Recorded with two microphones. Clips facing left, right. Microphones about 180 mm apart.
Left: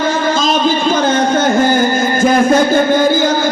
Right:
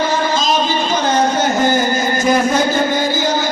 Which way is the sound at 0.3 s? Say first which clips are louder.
Left 3 dB; 50° left (ahead or behind).